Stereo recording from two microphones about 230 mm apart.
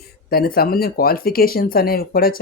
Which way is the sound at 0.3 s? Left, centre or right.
Left.